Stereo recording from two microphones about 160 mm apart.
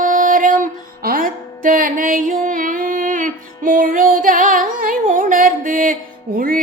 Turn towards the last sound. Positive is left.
turn(degrees=-60)  # may be behind; listen again after turning